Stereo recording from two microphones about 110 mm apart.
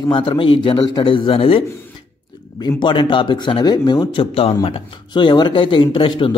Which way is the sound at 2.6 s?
45° left (ahead or behind).